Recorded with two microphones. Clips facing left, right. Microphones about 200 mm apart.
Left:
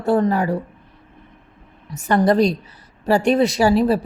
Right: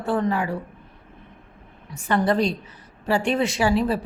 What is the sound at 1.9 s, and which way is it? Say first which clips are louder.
A woman's voice: left 5 dB; 40° left (ahead or behind).